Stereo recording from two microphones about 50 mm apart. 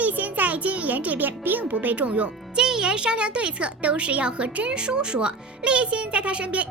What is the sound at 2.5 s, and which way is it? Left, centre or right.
Speech, centre.